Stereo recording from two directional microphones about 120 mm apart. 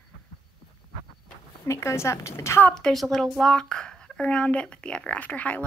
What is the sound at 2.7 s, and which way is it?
A woman's voice, 5° left (ahead or behind).